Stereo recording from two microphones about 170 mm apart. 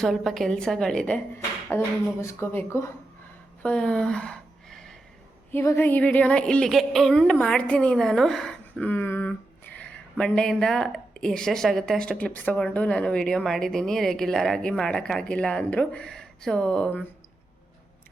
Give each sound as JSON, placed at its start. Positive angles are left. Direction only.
{"t": 0.0, "sound": "speech", "side_deg": 0}
{"t": 3.6, "sound": "a sound", "side_deg": 5}
{"t": 5.5, "sound": "speech", "side_deg": 15}